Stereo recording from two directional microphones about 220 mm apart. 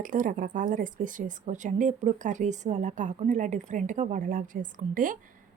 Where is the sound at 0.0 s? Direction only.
35° right (ahead or behind).